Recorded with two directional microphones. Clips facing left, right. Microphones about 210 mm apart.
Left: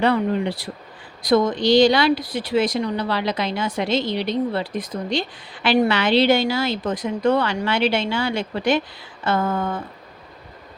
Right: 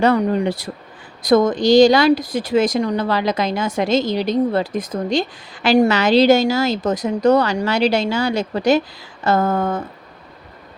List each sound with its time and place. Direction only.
0.0 s a woman's voice: 45° right (ahead or behind)